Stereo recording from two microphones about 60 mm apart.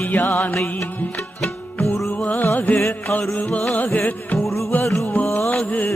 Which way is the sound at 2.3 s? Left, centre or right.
Left.